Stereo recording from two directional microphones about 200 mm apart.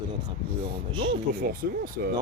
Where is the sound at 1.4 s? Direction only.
45° right (ahead or behind).